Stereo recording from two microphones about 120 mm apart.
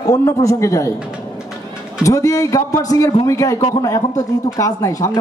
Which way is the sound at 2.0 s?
25° left (ahead or behind).